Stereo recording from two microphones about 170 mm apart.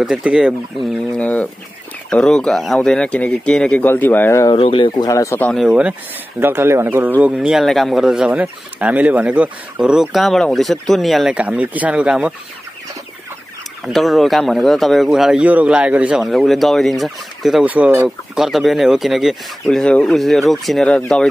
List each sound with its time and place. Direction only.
0.0 s speech: 5° right (ahead or behind); by 4.6 s 15° left (ahead or behind)
4.6 s speech: 30° left (ahead or behind)
5.5 s speech: centre (ahead or behind)
13.8 s speech: centre (ahead or behind)